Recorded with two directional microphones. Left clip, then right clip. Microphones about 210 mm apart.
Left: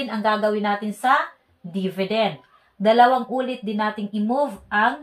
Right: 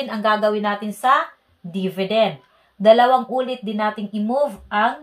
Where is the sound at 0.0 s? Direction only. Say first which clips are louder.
Right 3 dB; 55° right (ahead or behind).